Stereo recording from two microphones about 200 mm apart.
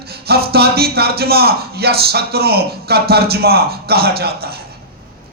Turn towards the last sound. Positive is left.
turn(degrees=-50)  # may be behind; listen again after turning